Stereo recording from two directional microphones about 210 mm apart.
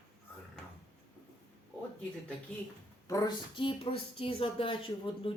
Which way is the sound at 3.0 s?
20° left (ahead or behind).